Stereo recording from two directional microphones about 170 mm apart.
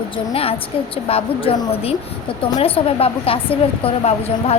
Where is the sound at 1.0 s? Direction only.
35° left (ahead or behind).